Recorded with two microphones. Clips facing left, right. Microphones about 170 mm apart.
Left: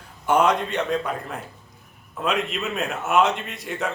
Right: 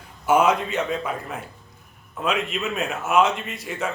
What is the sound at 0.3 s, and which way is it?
A man's voice, 5° right (ahead or behind).